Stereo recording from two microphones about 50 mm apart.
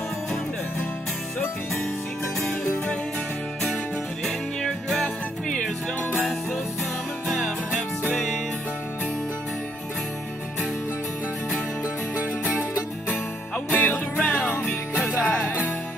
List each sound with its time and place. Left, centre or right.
4.2 s music: centre
13.7 s music: left